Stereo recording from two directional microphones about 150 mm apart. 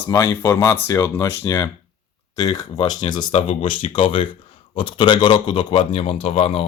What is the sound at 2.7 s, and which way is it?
Speech, 35° left (ahead or behind).